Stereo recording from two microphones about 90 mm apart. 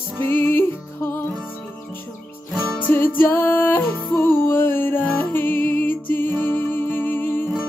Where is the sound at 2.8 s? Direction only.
20° left (ahead or behind).